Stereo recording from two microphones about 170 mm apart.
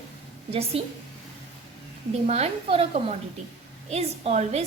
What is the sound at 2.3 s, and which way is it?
A woman's voice, 35° right (ahead or behind).